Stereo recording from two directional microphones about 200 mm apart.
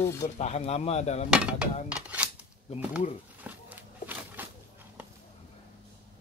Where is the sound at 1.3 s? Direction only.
5° right (ahead or behind).